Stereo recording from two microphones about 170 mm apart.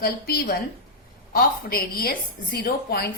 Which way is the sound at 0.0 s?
65° left (ahead or behind).